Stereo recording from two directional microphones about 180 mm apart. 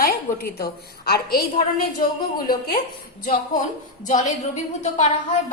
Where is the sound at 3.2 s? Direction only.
50° left (ahead or behind).